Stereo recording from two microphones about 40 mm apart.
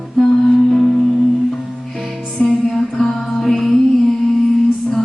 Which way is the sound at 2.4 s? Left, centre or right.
Left.